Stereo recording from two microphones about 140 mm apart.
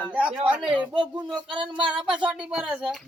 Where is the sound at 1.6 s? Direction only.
35° right (ahead or behind).